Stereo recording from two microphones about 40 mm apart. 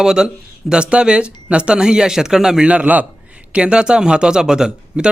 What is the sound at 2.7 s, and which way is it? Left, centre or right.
A man's voice, right.